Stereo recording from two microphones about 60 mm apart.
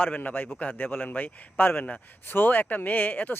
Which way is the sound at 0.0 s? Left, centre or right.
Left.